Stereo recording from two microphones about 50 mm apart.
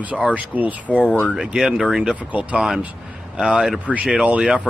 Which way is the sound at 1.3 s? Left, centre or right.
Centre.